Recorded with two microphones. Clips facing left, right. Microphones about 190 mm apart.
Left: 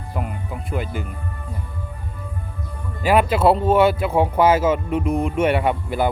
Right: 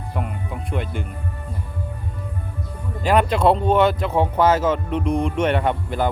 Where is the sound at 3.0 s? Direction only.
5° left (ahead or behind).